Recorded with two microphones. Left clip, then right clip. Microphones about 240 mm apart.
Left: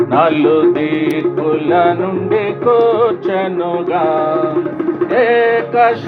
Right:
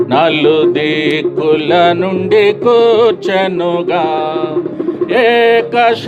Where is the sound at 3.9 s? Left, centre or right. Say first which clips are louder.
Left 1 dB; right.